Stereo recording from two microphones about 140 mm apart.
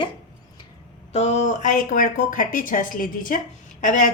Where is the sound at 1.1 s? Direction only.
55° left (ahead or behind).